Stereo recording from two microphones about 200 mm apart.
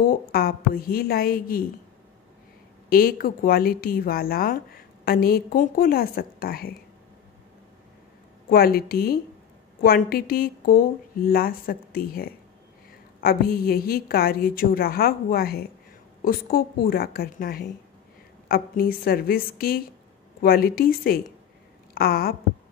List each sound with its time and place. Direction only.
0.0 s a woman's voice: 50° left (ahead or behind)
2.9 s a woman's voice: 45° left (ahead or behind)
8.5 s a woman's voice: 50° left (ahead or behind)
21.9 s a sound: 50° left (ahead or behind)